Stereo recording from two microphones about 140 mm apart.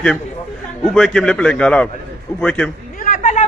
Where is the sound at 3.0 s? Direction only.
70° left (ahead or behind).